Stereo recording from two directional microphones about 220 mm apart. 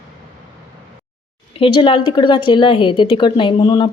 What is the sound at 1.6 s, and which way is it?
A woman's voice, 25° left (ahead or behind).